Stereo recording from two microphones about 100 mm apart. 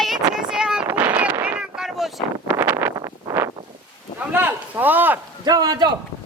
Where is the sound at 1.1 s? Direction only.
20° right (ahead or behind).